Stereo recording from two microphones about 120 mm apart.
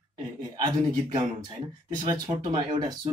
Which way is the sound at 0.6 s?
35° right (ahead or behind).